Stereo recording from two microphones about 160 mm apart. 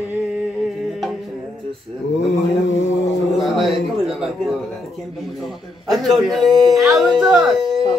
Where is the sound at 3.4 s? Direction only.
Centre (ahead or behind).